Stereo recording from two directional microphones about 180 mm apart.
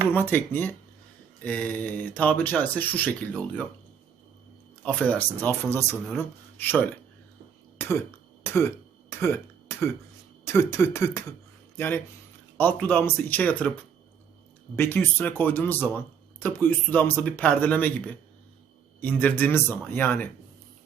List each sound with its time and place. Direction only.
0.1 s speech: 10° left (ahead or behind)
4.8 s speech: 10° left (ahead or behind)
7.8 s throat clearing: 15° left (ahead or behind)
8.4 s a sound: 15° left (ahead or behind)
10.4 s speech: 15° left (ahead or behind)
14.8 s speech: 10° left (ahead or behind)